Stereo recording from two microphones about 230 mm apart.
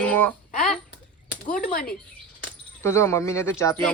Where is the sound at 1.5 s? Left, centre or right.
Left.